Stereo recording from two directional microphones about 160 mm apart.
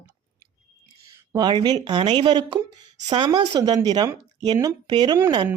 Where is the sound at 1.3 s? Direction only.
25° right (ahead or behind).